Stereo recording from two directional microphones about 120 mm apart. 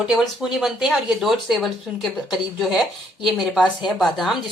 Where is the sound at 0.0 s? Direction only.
5° right (ahead or behind).